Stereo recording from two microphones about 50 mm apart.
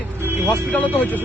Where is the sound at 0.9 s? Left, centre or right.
Left.